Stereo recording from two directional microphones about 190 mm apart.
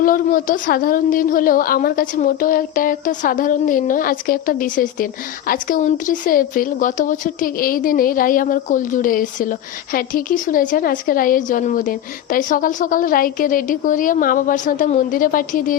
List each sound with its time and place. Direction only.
0.0 s speech: 45° left (ahead or behind)